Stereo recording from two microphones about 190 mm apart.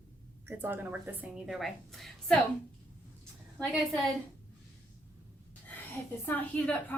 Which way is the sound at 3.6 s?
Centre (ahead or behind).